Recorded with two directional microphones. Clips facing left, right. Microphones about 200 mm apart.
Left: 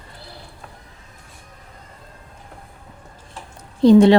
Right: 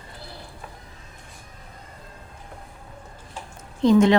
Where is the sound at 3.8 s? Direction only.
35° left (ahead or behind).